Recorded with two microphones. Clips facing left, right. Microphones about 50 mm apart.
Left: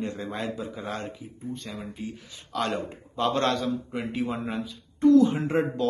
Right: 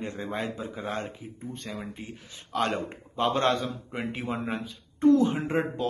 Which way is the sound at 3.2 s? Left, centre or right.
Centre.